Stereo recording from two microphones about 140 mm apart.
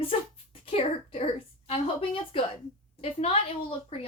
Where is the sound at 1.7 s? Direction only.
40° left (ahead or behind).